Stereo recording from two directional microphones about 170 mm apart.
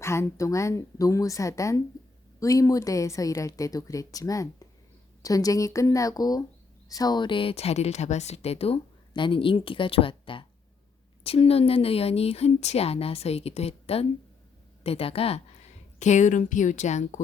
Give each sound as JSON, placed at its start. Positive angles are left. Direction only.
{"t": 0.0, "sound": "a woman's voice", "side_deg": 15}